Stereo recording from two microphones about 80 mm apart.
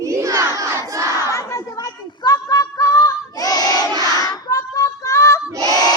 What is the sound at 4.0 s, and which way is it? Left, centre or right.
Child singing, left.